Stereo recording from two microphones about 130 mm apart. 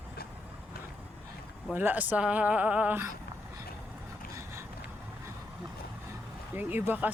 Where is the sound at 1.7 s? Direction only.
15° right (ahead or behind).